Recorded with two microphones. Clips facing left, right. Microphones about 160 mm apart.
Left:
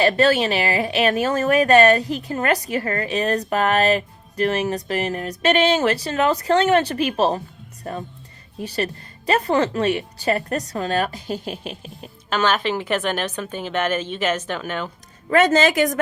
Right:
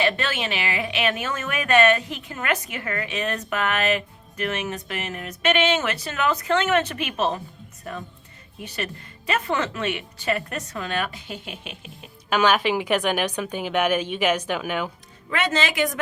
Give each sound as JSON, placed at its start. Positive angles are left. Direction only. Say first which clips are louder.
{"t": 0.0, "sound": "speech", "louder": "left 8 dB", "side_deg": 40}
{"t": 12.3, "sound": "a woman's voice", "louder": "right 1 dB", "side_deg": -10}
{"t": 15.3, "sound": "a woman's voice", "louder": "left 9 dB", "side_deg": 40}